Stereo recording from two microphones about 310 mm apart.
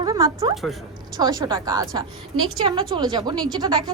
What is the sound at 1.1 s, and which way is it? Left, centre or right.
A woman's voice, centre.